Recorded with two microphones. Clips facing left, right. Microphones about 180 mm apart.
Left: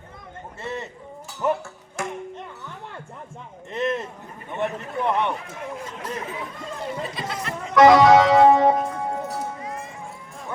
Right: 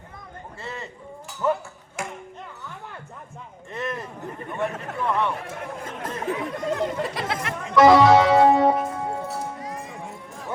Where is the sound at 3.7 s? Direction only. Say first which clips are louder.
Left 5 dB; 20° left (ahead or behind).